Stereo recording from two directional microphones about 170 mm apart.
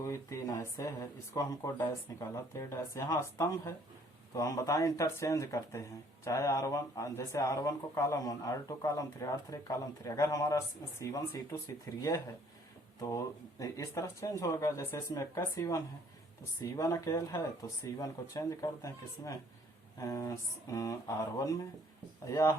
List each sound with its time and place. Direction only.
0.0 s speech: 20° left (ahead or behind)